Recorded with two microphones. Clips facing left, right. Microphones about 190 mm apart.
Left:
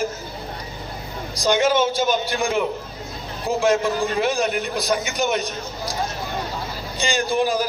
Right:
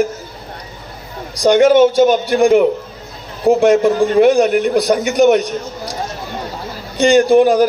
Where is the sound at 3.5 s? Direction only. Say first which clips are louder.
Right 12 dB; 45° right (ahead or behind).